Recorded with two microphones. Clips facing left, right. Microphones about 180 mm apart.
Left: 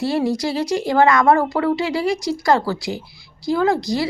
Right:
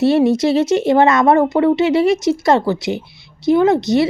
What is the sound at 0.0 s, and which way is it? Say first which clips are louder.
Speech: right 7 dB; 25° right (ahead or behind).